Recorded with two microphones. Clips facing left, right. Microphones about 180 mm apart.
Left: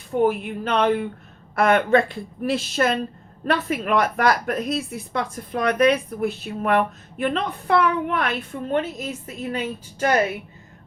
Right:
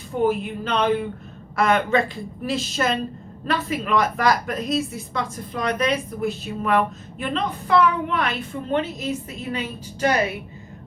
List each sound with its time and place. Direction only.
0.2 s a woman's voice: 55° left (ahead or behind)